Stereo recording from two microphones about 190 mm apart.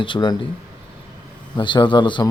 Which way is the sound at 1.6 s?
25° left (ahead or behind).